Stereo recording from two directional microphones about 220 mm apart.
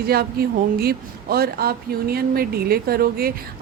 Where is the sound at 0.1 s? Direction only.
45° right (ahead or behind).